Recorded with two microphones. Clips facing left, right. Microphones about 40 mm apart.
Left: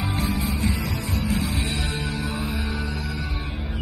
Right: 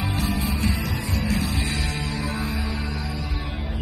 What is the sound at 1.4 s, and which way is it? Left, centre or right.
Music, left.